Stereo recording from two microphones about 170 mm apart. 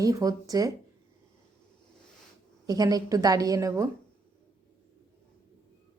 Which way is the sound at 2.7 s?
20° right (ahead or behind).